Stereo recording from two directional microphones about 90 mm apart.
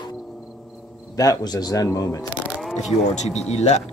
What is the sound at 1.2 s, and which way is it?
Speech, 45° left (ahead or behind).